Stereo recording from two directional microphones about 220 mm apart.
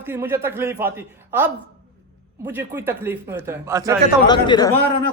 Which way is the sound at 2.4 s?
10° right (ahead or behind).